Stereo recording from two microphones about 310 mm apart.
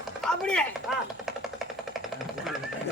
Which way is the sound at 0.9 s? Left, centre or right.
Centre.